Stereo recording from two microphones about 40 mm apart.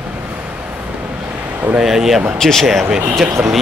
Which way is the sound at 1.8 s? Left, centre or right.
Centre.